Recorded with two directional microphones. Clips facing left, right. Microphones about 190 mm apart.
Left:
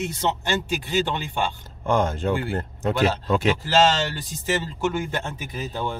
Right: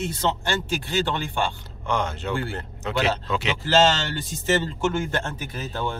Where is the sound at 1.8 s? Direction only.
45° left (ahead or behind).